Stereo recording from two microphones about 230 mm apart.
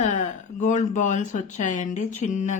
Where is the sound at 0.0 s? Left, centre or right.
Left.